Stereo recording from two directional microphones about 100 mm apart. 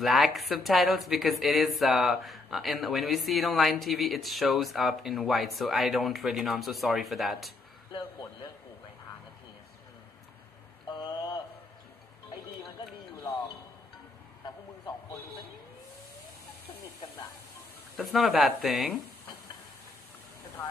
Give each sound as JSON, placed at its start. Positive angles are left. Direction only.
{"t": 0.0, "sound": "speech", "side_deg": 0}
{"t": 10.9, "sound": "a sound", "side_deg": 40}
{"t": 17.9, "sound": "speech", "side_deg": 0}